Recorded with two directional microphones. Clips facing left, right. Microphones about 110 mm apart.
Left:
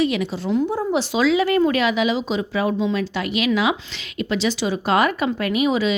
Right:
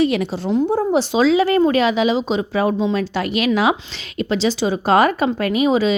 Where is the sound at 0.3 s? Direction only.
25° right (ahead or behind).